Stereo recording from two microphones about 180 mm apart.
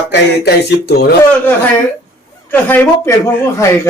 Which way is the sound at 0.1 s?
60° left (ahead or behind).